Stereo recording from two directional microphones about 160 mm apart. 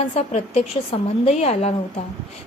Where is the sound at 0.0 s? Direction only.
40° left (ahead or behind).